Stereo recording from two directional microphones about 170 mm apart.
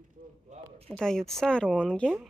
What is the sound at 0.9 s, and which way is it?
Speech, centre (ahead or behind).